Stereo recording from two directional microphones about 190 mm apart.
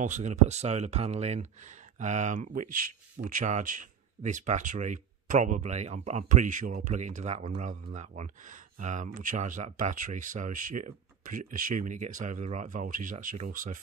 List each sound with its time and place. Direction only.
0.0 s speech: 40° right (ahead or behind)